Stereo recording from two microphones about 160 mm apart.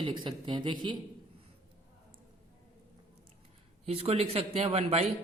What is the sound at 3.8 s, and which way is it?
A man's voice, 40° right (ahead or behind).